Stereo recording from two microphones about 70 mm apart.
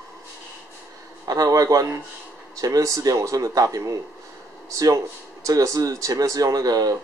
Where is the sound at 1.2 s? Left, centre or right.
Right.